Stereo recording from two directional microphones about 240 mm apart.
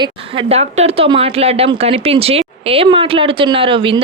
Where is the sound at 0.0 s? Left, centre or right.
Right.